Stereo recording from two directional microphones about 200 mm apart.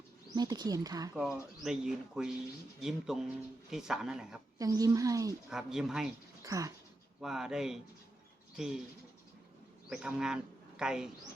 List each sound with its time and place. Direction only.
0.3 s speech: 20° right (ahead or behind)
1.1 s speech: 5° right (ahead or behind)
4.5 s a woman's voice: 15° right (ahead or behind)
5.5 s speech: centre (ahead or behind)
6.4 s speech: 15° right (ahead or behind)
7.2 s speech: centre (ahead or behind)
9.9 s a man's voice: 5° right (ahead or behind)